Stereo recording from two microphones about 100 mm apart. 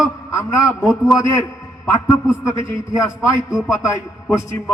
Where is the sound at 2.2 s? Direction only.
30° left (ahead or behind).